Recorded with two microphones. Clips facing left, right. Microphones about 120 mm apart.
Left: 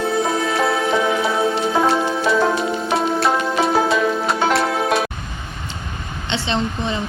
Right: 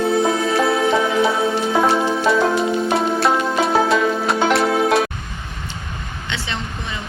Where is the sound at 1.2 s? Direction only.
Centre (ahead or behind).